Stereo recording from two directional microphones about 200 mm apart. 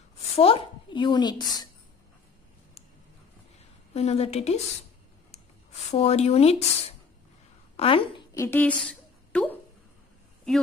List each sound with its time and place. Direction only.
0.4 s a woman's voice: 30° left (ahead or behind)
3.9 s speech: 30° left (ahead or behind)
5.9 s a woman's voice: 30° left (ahead or behind)
8.4 s a woman's voice: 10° left (ahead or behind)